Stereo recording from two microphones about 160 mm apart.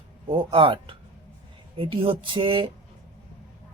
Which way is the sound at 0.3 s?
35° right (ahead or behind).